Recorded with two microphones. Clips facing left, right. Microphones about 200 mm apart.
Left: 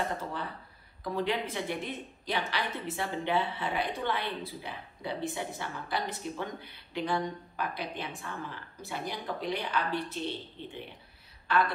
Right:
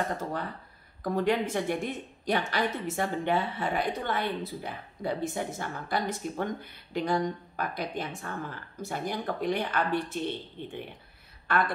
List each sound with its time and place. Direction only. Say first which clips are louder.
0.2 s a woman's voice: right 4 dB; 45° right (ahead or behind)